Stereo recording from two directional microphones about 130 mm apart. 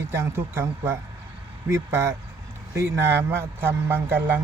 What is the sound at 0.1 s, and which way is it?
A man's voice, 20° right (ahead or behind).